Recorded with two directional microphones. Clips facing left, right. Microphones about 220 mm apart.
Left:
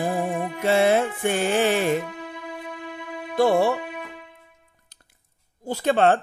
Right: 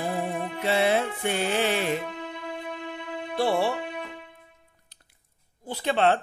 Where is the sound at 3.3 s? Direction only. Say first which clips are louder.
Left 6 dB; 45° left (ahead or behind).